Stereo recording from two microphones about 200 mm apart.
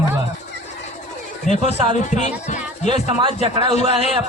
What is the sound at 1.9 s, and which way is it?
Speech, 35° left (ahead or behind).